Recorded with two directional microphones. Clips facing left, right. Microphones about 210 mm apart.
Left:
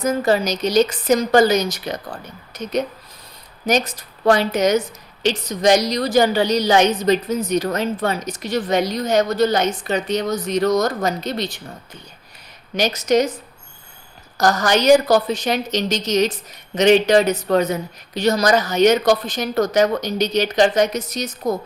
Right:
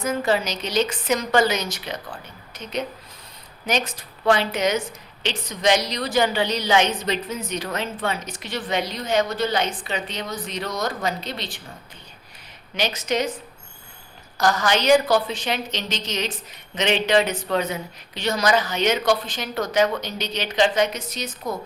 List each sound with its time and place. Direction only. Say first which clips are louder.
0.0 s a woman's voice: left 4 dB; 40° left (ahead or behind)
12.7 s a woman's voice: left 7 dB; 40° left (ahead or behind)
14.3 s a woman's voice: left 4 dB; 40° left (ahead or behind)